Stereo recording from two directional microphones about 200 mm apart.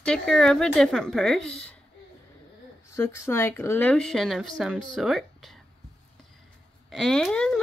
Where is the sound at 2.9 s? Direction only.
15° left (ahead or behind).